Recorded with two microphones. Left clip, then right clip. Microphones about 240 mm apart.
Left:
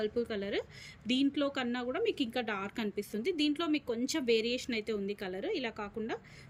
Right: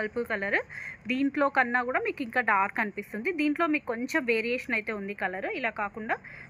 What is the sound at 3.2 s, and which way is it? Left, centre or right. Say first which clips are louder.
Speech: right 4 dB; left.